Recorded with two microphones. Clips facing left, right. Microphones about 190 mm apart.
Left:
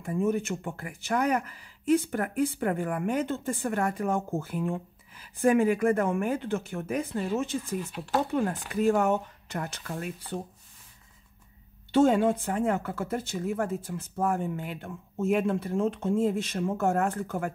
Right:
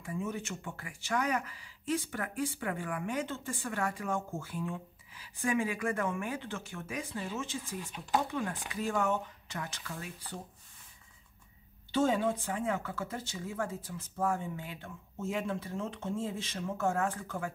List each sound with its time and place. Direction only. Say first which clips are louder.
0.0 s speech: left 10 dB; 50° left (ahead or behind)
8.3 s speech: left 8 dB; 50° left (ahead or behind)
11.9 s speech: left 7 dB; 55° left (ahead or behind)